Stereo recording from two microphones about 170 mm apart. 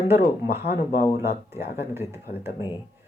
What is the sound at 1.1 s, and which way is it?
Speech, 15° right (ahead or behind).